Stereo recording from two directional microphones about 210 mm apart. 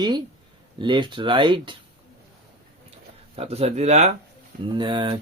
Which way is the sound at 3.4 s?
30° right (ahead or behind).